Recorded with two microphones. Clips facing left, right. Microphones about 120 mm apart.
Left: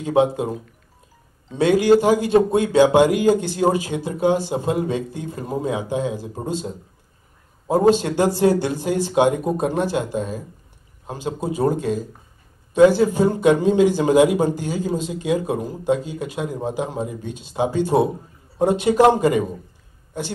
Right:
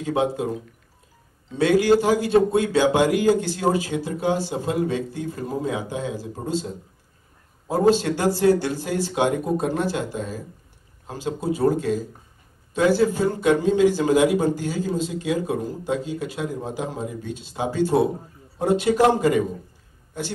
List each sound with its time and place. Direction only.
0.0 s a man's voice: 20° left (ahead or behind)
1.6 s a man's voice: 20° left (ahead or behind)